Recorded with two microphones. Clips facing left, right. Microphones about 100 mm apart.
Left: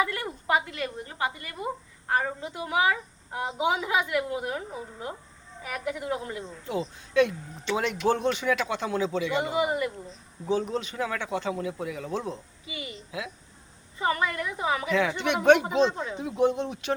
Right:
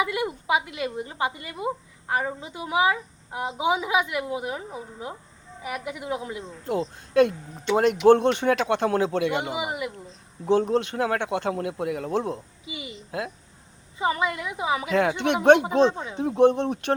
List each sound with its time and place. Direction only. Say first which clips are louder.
0.0 s speech: right 3 dB; 10° right (ahead or behind)
6.7 s a man's voice: right 5 dB; 55° right (ahead or behind)
9.5 s speech: left 3 dB; 10° right (ahead or behind)
10.5 s a man's voice: right 6 dB; 65° right (ahead or behind)
12.6 s a woman's voice: even; 20° right (ahead or behind)
13.1 s speech: right 6 dB; 50° right (ahead or behind)
14.0 s speech: right 2 dB; 15° right (ahead or behind)
14.9 s a man's voice: right 6 dB; 55° right (ahead or behind)